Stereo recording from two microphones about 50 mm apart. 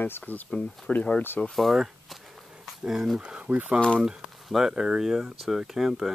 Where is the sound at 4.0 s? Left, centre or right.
Centre.